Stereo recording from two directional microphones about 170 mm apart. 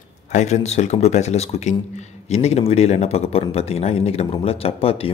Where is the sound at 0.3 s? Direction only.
40° left (ahead or behind).